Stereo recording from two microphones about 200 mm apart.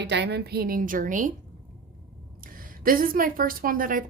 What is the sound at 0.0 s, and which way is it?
A woman's voice, 60° right (ahead or behind).